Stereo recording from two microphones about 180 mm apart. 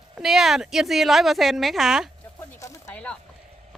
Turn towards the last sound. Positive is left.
turn(degrees=10)  # may be behind; listen again after turning